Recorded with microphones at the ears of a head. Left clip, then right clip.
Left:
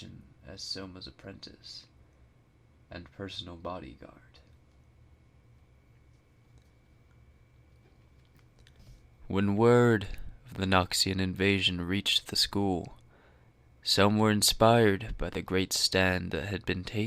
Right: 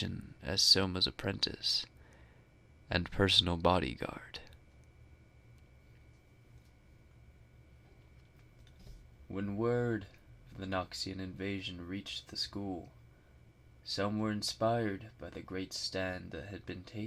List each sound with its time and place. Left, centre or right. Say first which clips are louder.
0.0 s speech: right 9 dB; right
2.9 s speech: right 13 dB; right
9.2 s speech: left 10 dB; left